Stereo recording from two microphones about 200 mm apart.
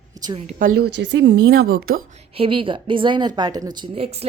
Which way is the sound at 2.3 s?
25° right (ahead or behind).